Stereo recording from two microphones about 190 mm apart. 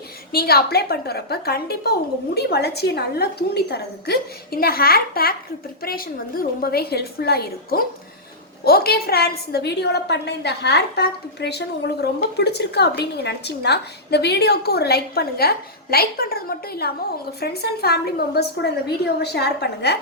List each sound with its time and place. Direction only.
0.3 s a woman's voice: 55° left (ahead or behind)